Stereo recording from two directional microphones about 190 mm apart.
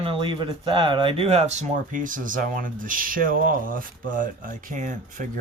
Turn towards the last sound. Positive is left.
turn(degrees=-45)  # may be behind; listen again after turning